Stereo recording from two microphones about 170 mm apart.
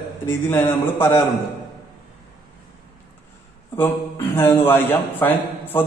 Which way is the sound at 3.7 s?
15° left (ahead or behind).